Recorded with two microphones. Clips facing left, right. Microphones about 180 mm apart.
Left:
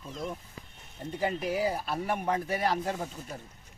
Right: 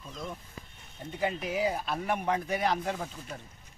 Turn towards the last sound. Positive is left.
turn(degrees=5)  # may be behind; listen again after turning